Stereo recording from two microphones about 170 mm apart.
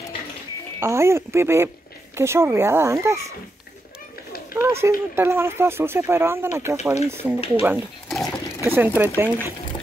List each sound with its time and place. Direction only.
0.7 s speech: 15° right (ahead or behind)
4.6 s speech: 15° right (ahead or behind)
7.3 s speech: 35° left (ahead or behind)
8.1 s patter: centre (ahead or behind)
8.6 s speech: 10° right (ahead or behind)